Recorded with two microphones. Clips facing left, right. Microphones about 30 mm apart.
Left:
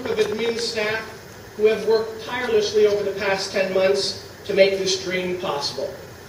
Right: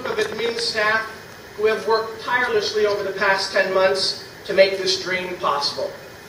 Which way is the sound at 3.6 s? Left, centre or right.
Centre.